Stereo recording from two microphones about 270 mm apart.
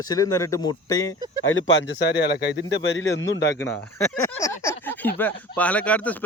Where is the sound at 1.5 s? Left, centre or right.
Left.